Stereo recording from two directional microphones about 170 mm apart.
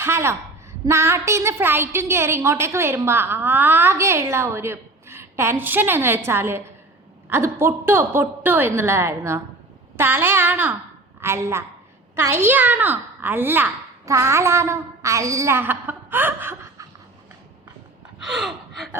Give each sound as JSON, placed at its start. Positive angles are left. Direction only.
{"t": 0.0, "sound": "a woman's voice", "side_deg": -15}
{"t": 18.2, "sound": "gasp", "side_deg": 0}